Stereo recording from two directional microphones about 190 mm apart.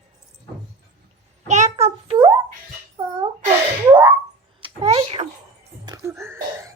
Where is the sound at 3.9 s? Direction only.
25° right (ahead or behind).